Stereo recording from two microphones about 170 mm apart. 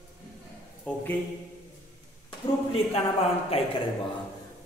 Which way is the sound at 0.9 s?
10° left (ahead or behind).